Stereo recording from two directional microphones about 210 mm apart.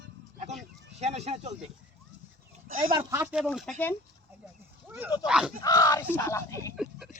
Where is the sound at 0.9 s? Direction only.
30° right (ahead or behind).